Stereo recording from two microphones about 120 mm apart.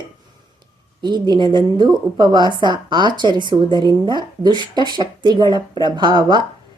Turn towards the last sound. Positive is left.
turn(degrees=-40)  # may be behind; listen again after turning